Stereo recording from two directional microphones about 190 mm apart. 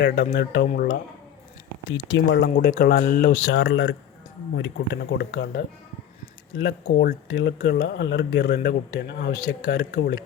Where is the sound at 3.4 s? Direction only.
80° left.